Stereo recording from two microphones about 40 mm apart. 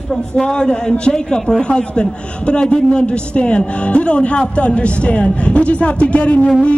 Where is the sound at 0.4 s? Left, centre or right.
Left.